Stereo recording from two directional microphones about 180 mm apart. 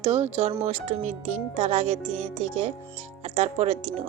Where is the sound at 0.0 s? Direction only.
35° right (ahead or behind).